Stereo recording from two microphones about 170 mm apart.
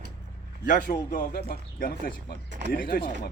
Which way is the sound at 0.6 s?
50° left (ahead or behind).